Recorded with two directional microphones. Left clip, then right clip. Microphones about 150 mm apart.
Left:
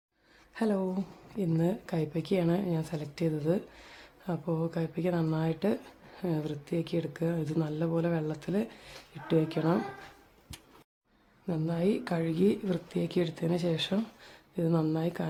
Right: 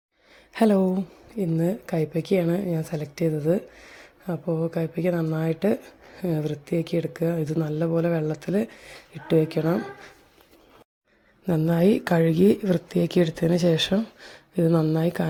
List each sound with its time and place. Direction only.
0.5 s a woman's voice: 45° right (ahead or behind)
1.5 s a woman's voice: 20° right (ahead or behind)
11.4 s speech: 40° right (ahead or behind)
14.7 s a woman's voice: 25° right (ahead or behind)
14.9 s speech: 40° right (ahead or behind)